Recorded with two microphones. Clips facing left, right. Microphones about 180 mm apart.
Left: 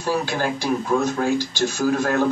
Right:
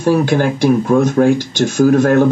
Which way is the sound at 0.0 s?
55° right (ahead or behind).